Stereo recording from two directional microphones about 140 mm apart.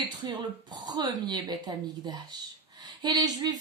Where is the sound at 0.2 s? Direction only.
30° right (ahead or behind).